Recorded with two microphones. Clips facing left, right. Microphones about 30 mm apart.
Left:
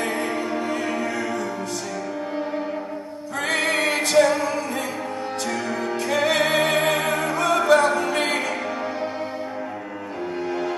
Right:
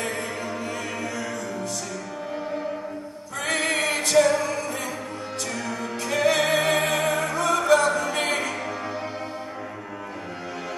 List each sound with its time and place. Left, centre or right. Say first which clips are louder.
0.0 s music: left 4 dB; left
3.4 s music: left 2 dB; left
5.7 s music: left 5 dB; left
6.0 s music: even; left
6.5 s music: left 1 dB; left
7.0 s opera: left 1 dB; left
8.2 s music: left 2 dB; left